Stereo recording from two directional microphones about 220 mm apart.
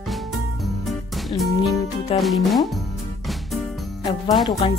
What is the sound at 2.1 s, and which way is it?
Speech, centre (ahead or behind).